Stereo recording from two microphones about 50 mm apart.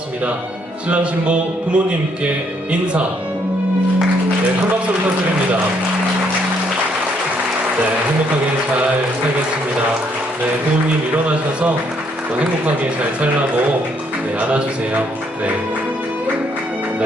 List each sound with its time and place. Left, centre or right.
0.9 s speech: right
14.4 s speech: right